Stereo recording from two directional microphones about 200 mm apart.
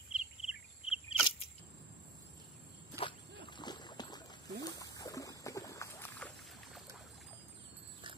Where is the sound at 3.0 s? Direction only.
20° left (ahead or behind).